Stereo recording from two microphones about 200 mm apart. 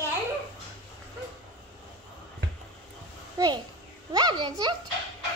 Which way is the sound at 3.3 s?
20° right (ahead or behind).